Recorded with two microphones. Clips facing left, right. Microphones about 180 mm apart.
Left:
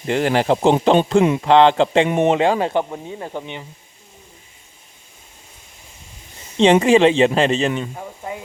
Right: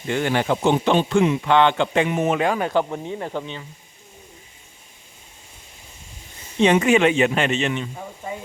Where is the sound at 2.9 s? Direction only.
5° left (ahead or behind).